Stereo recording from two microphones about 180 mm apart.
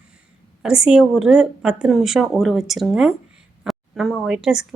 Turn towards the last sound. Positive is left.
turn(degrees=0)  # may be behind; listen again after turning